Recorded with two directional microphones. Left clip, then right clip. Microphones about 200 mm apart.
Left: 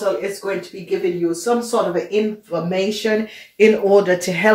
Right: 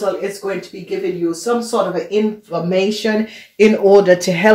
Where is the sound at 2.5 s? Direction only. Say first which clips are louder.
Right 3 dB; 45° right (ahead or behind).